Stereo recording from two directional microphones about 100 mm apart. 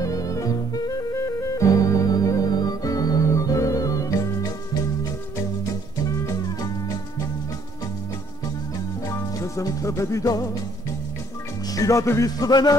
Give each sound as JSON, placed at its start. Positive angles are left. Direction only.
{"t": 0.0, "sound": "music", "side_deg": 35}
{"t": 6.0, "sound": "music", "side_deg": 35}
{"t": 9.1, "sound": "music", "side_deg": 30}
{"t": 11.7, "sound": "music", "side_deg": 35}